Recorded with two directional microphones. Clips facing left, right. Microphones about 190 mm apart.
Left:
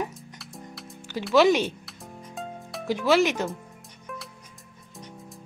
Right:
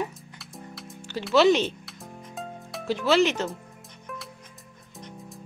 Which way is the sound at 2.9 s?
10° left (ahead or behind).